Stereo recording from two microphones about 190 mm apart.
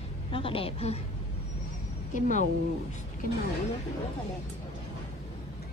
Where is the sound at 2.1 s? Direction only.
40° left (ahead or behind).